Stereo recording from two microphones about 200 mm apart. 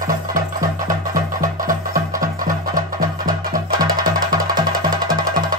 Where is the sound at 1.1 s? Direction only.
40° right (ahead or behind).